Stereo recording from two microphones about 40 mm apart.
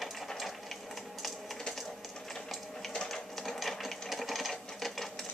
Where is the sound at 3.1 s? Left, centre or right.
Centre.